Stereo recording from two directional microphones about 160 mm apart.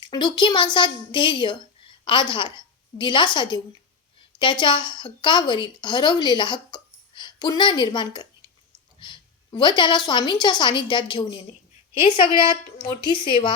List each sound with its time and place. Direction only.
0.0 s a child's voice: 25° left (ahead or behind)
4.6 s a woman's voice: 30° left (ahead or behind)